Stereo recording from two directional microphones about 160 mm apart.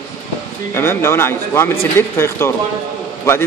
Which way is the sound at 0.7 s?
15° left (ahead or behind).